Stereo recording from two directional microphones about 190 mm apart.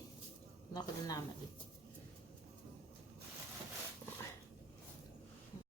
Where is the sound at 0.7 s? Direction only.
20° left (ahead or behind).